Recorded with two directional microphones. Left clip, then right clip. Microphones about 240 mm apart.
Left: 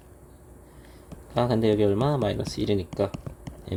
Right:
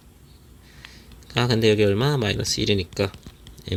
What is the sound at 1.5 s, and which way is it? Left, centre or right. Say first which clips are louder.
Speech: right 5 dB; right.